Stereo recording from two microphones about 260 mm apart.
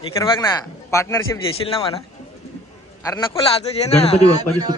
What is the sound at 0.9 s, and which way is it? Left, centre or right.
Speech, centre.